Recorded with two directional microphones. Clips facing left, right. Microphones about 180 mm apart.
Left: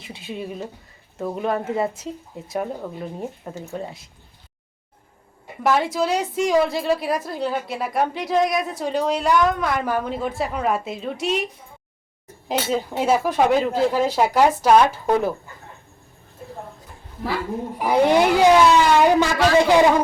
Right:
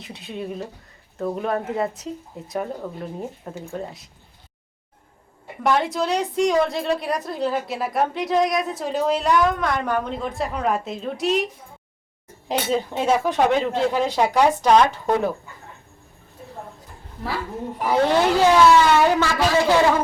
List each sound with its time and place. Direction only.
0.0 s a woman's voice: centre (ahead or behind)
5.6 s a woman's voice: 5° left (ahead or behind)
12.5 s a woman's voice: centre (ahead or behind)
17.8 s a woman's voice: 15° left (ahead or behind)